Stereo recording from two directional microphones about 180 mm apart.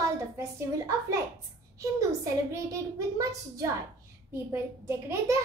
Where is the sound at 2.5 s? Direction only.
15° right (ahead or behind).